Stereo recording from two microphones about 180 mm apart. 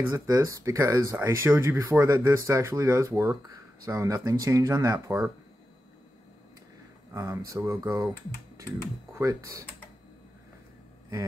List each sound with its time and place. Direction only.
0.1 s speech: 20° right (ahead or behind)
7.2 s speech: 15° right (ahead or behind)
9.1 s speech: 15° right (ahead or behind)